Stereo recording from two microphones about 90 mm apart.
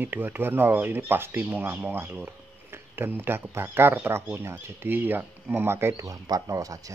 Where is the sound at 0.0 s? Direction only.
20° right (ahead or behind).